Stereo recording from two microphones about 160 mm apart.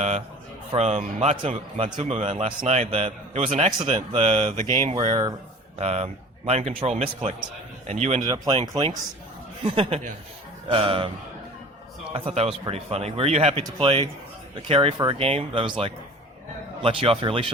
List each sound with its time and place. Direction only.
0.7 s speech: 40° right (ahead or behind)
3.8 s speech: 30° right (ahead or behind)
5.0 s speech: 30° right (ahead or behind)
5.8 s a man's voice: 40° right (ahead or behind)
8.2 s speech: 25° right (ahead or behind)
12.1 s speech: 40° right (ahead or behind)